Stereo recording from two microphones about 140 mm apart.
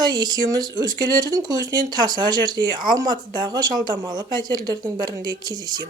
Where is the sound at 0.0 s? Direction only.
30° right (ahead or behind).